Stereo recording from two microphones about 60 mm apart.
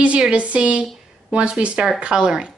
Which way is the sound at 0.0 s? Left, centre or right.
Right.